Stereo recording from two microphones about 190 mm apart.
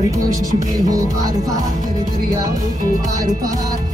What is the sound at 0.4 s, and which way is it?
Music, 20° right (ahead or behind).